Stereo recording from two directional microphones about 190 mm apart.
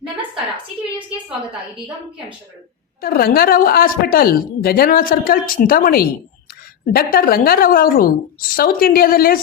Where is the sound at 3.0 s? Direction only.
50° left (ahead or behind).